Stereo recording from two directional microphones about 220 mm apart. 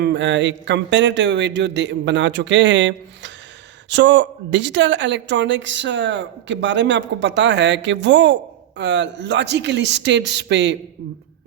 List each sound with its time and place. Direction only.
0.0 s a woman's voice: 55° right (ahead or behind)